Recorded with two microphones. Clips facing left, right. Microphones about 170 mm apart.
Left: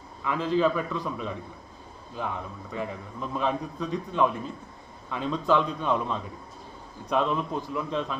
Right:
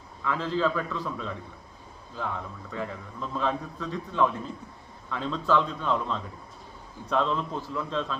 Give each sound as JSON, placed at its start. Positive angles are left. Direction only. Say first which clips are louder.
{"t": 0.3, "sound": "a man's voice", "louder": "left 3 dB", "side_deg": 15}